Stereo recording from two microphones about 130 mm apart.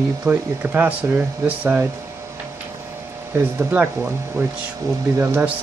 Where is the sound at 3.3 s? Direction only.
15° right (ahead or behind).